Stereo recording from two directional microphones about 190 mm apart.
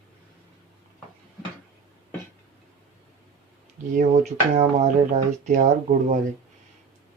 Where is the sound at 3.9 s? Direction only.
40° right (ahead or behind).